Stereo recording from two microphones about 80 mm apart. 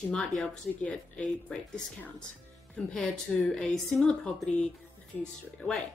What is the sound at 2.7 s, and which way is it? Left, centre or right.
A woman's voice, centre.